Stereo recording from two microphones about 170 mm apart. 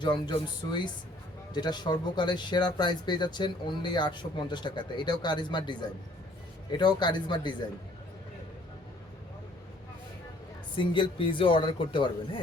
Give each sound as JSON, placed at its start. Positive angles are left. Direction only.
{"t": 0.0, "sound": "speech", "side_deg": 25}
{"t": 10.8, "sound": "speech", "side_deg": 30}